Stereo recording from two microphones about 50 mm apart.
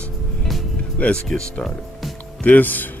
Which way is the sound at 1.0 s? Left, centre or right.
Left.